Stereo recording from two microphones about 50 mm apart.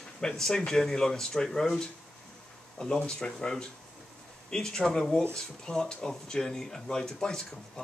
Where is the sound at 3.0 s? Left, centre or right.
Centre.